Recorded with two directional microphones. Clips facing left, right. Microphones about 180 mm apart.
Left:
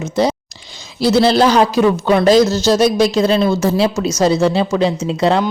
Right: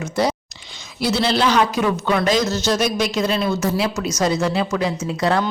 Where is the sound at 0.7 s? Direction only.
35° left (ahead or behind).